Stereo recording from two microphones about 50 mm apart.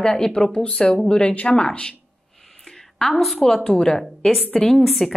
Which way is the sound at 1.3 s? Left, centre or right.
Left.